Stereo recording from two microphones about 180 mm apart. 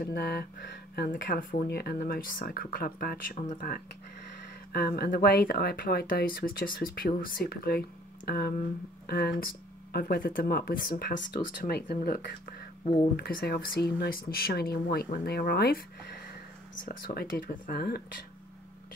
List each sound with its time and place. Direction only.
0.0 s speech: 60° left (ahead or behind)
3.3 s speech: 45° left (ahead or behind)